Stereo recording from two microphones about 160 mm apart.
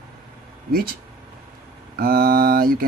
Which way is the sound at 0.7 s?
65° right (ahead or behind).